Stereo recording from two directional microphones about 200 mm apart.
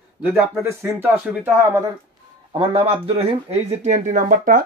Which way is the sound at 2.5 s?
30° right (ahead or behind).